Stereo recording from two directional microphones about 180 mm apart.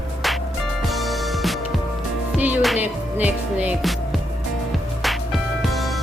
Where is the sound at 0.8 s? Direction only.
Centre (ahead or behind).